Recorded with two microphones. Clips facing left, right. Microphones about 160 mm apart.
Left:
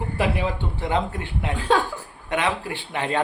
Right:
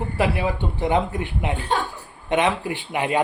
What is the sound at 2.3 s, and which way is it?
Speech, 20° right (ahead or behind).